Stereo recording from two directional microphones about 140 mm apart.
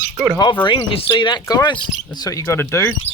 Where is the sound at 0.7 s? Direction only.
35° left (ahead or behind).